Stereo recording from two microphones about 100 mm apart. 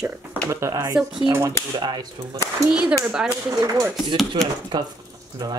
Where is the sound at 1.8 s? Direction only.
45° right (ahead or behind).